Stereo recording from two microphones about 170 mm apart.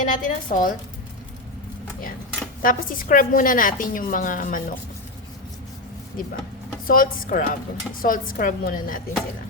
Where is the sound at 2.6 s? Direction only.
55° left (ahead or behind).